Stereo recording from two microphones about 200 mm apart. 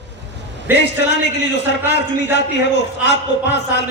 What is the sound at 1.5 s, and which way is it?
Speech, 60° left (ahead or behind).